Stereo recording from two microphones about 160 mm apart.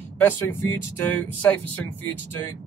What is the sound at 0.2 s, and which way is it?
Speech, 15° left (ahead or behind).